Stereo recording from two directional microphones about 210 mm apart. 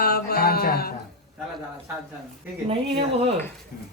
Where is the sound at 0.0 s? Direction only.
50° left (ahead or behind).